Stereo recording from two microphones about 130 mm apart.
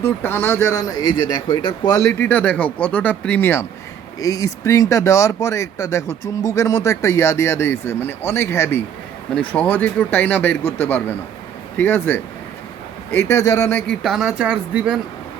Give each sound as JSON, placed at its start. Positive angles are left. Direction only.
{"t": 0.0, "sound": "speech", "side_deg": 15}
{"t": 2.2, "sound": "speech", "side_deg": 10}
{"t": 14.0, "sound": "speech", "side_deg": 0}